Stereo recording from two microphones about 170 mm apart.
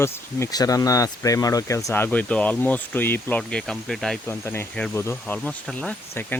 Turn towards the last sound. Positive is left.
turn(degrees=10)  # may be behind; listen again after turning